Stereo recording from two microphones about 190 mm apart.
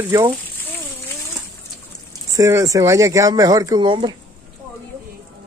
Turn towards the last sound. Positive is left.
turn(degrees=-25)  # may be behind; listen again after turning